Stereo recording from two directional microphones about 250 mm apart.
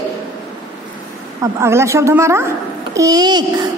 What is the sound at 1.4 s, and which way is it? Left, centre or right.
A child's voice, centre.